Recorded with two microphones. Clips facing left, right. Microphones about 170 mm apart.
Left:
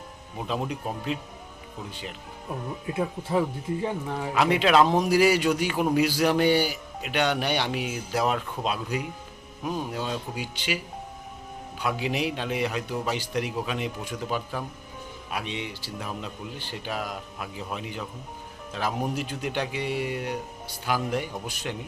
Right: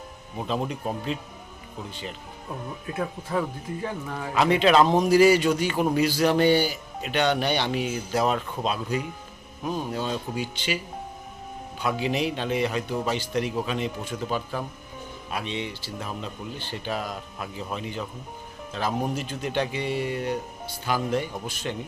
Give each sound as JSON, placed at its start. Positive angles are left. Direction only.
{"t": 0.3, "sound": "a man's voice", "side_deg": 5}
{"t": 2.8, "sound": "speech", "side_deg": 20}
{"t": 4.4, "sound": "a man's voice", "side_deg": 5}
{"t": 11.8, "sound": "a man's voice", "side_deg": 10}